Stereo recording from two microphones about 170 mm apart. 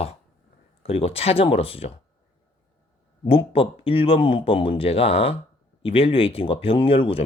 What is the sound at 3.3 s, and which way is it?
Speech, 35° left (ahead or behind).